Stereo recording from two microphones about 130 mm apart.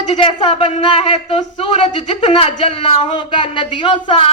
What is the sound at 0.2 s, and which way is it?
A woman's voice, 40° left (ahead or behind).